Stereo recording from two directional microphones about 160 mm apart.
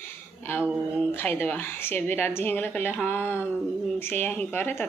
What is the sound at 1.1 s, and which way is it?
Speech, 15° left (ahead or behind).